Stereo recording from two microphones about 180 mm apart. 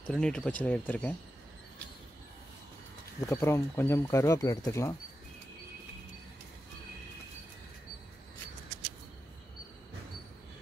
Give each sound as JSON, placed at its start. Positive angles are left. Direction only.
{"t": 0.0, "sound": "speech", "side_deg": 5}
{"t": 3.2, "sound": "speech", "side_deg": 15}